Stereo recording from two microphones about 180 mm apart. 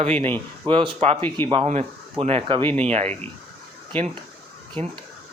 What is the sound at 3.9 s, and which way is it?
Speech, 10° left (ahead or behind).